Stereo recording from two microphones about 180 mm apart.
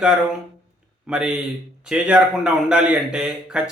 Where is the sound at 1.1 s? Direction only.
5° right (ahead or behind).